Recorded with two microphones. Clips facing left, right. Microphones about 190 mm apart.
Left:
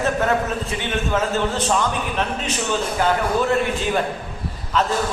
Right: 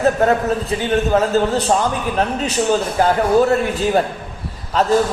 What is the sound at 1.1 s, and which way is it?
A man's voice, 40° right (ahead or behind).